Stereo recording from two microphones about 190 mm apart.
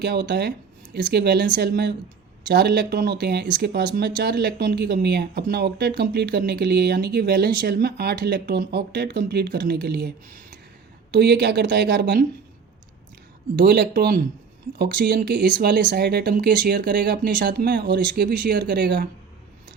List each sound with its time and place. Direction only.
0.0 s speech: 65° right (ahead or behind)
13.6 s speech: 60° right (ahead or behind)